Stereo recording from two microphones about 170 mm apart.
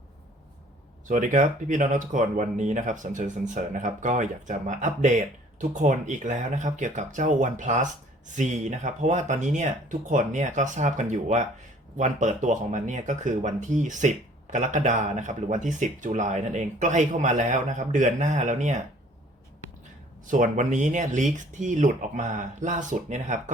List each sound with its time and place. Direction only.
1.0 s speech: 50° right (ahead or behind)
20.2 s speech: 50° right (ahead or behind)